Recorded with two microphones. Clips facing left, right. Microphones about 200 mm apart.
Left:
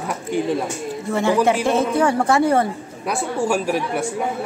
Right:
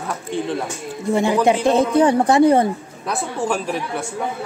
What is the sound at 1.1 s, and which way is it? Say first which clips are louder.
A woman's voice: right 1 dB; 15° right (ahead or behind).